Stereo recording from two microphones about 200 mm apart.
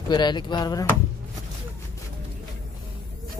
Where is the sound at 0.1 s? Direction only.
20° left (ahead or behind).